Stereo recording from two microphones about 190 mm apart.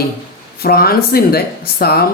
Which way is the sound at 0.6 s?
55° left (ahead or behind).